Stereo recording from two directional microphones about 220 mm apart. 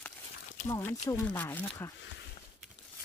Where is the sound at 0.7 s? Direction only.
10° left (ahead or behind).